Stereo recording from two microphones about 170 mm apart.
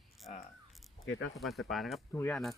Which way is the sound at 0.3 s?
40° left (ahead or behind).